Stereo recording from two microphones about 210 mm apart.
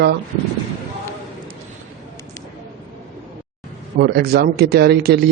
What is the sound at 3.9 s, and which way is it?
A man's voice, 50° right (ahead or behind).